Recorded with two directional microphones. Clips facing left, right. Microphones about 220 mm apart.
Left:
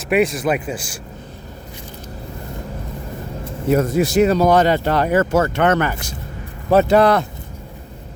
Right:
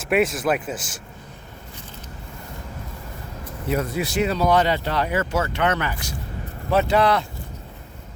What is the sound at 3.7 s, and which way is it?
Speech, 45° left (ahead or behind).